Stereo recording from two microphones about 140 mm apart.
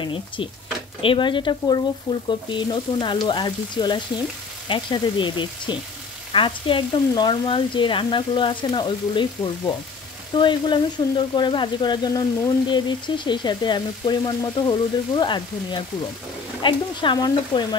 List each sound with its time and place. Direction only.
0.0 s speech: 35° left (ahead or behind)